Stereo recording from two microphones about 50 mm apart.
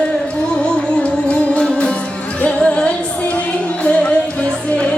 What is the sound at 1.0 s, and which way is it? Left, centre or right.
Music, left.